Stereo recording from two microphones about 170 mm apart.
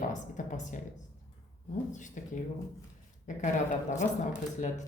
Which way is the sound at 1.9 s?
45° left (ahead or behind).